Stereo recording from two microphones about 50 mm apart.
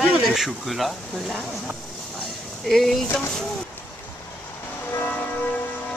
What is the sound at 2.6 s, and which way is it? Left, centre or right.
Speech, centre.